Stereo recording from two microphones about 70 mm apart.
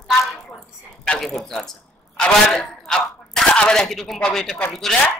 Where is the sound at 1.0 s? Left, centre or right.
Centre.